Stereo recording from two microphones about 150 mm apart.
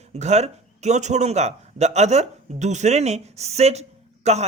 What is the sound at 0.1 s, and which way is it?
Speech, 50° right (ahead or behind).